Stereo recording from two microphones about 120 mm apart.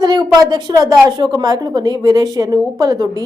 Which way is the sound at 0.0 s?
35° right (ahead or behind).